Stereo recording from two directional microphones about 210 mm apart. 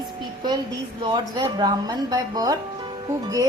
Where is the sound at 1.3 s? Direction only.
20° right (ahead or behind).